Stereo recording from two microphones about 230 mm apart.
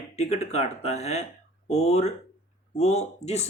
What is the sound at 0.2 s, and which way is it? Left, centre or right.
Speech, left.